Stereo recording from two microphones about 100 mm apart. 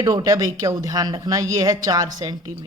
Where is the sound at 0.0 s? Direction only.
35° right (ahead or behind).